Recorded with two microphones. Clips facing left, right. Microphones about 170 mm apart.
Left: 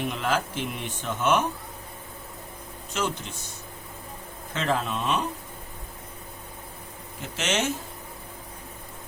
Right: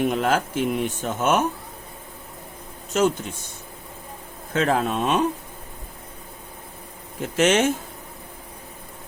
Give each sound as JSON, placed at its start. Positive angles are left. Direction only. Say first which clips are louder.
{"t": 0.0, "sound": "speech", "louder": "right 6 dB", "side_deg": -45}
{"t": 4.5, "sound": "speech", "louder": "right 6 dB", "side_deg": -50}
{"t": 7.2, "sound": "speech", "louder": "right 9 dB", "side_deg": -50}